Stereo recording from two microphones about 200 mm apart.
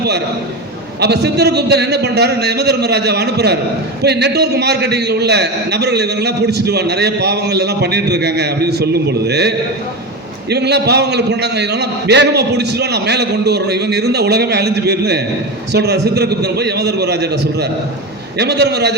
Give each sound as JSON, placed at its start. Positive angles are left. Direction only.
{"t": 0.9, "sound": "a man's voice", "side_deg": -55}